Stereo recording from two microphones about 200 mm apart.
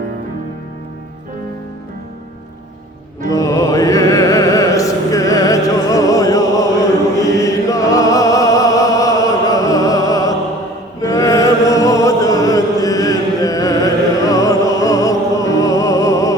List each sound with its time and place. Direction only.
3.2 s music: 15° left (ahead or behind)